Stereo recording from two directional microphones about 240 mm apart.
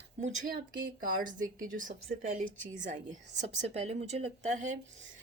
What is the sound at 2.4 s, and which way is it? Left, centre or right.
Speech, centre.